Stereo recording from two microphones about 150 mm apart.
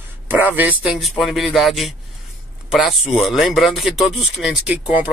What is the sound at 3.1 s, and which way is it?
Speech, centre (ahead or behind).